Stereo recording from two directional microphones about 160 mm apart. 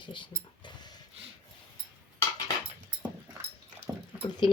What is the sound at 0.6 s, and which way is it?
Dog, 25° left (ahead or behind).